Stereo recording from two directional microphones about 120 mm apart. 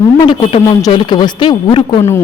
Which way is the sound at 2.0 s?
20° left (ahead or behind).